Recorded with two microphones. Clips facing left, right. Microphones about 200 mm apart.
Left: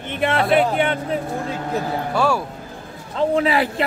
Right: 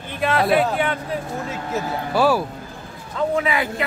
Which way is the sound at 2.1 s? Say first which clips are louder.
Right 3 dB; 5° right (ahead or behind).